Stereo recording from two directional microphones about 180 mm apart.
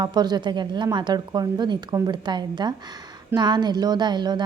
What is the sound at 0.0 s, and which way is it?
A woman's voice, 25° right (ahead or behind).